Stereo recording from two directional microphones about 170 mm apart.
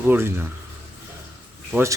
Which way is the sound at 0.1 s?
15° right (ahead or behind).